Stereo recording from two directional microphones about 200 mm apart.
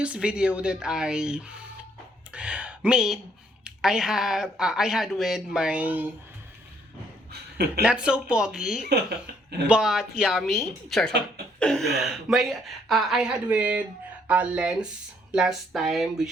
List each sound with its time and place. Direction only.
0.0 s speech: 5° right (ahead or behind)
7.8 s speech: 5° right (ahead or behind)
8.9 s speech: 55° right (ahead or behind)
9.6 s speech: 5° right (ahead or behind)